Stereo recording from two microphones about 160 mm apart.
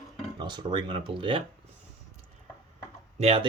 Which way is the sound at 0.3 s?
30° right (ahead or behind).